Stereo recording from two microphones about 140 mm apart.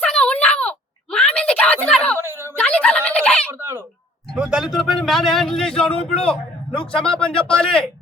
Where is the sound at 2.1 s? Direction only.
15° right (ahead or behind).